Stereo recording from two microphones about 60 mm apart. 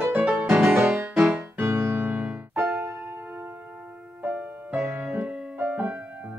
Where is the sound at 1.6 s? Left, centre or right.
Right.